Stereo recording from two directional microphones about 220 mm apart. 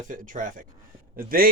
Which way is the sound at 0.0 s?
35° right (ahead or behind).